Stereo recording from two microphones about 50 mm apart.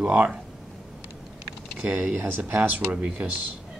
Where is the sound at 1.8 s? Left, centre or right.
Right.